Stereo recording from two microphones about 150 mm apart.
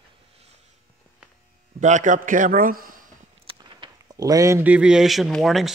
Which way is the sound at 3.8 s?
25° right (ahead or behind).